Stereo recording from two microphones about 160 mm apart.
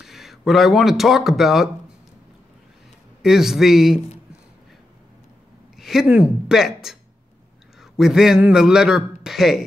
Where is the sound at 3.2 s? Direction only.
5° right (ahead or behind).